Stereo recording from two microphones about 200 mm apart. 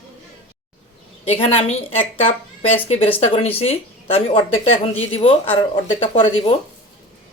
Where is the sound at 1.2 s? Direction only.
25° left (ahead or behind).